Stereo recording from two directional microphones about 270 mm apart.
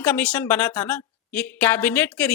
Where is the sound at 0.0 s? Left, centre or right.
Centre.